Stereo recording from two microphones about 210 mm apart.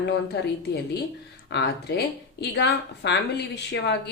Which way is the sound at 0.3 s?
50° left (ahead or behind).